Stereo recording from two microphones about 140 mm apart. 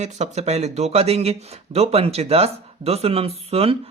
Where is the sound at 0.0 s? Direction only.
50° right (ahead or behind).